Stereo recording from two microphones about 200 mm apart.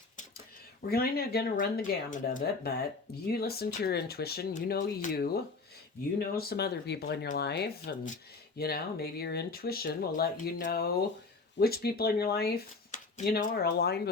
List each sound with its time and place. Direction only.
0.9 s speech: 50° left (ahead or behind)